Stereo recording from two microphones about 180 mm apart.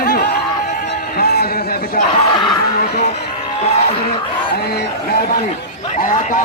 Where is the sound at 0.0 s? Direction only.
55° left (ahead or behind).